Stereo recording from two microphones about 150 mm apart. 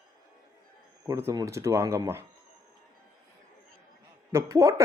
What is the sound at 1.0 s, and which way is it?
Speech, 20° right (ahead or behind).